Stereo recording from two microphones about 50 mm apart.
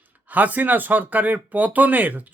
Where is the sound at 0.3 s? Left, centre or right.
Right.